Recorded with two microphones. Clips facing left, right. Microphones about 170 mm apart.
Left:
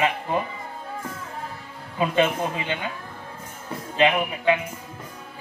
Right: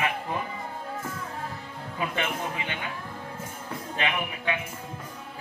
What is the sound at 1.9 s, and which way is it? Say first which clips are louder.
Speech: left 9 dB; 25° left (ahead or behind).